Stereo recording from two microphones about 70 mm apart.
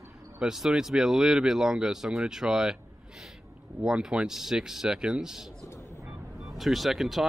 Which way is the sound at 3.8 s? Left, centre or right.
Centre.